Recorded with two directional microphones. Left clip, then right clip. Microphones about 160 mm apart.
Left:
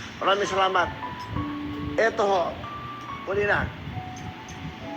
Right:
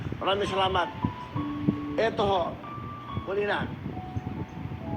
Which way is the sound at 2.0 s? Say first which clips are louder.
Left 4 dB; 55° right (ahead or behind).